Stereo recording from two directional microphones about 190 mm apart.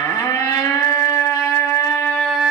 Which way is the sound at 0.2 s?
15° left (ahead or behind).